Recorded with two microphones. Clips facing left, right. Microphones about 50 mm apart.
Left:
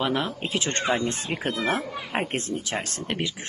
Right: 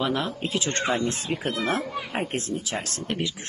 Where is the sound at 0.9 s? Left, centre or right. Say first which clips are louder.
Even; left.